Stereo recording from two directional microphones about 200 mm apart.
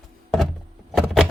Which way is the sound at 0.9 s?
Centre (ahead or behind).